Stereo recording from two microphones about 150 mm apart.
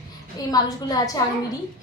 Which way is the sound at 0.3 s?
25° left (ahead or behind).